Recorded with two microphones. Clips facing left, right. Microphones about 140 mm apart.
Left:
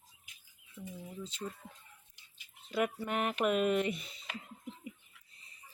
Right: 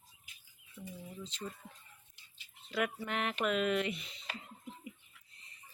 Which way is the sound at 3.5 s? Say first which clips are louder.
Left 2 dB; 40° left (ahead or behind).